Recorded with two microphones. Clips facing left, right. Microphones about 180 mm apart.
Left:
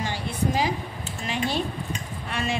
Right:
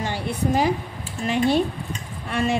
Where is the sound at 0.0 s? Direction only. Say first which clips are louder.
Right 2 dB; 55° right (ahead or behind).